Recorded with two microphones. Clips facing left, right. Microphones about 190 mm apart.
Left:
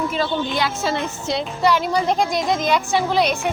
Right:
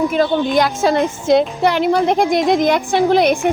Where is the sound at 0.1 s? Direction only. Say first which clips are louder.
Right 7 dB; 50° right (ahead or behind).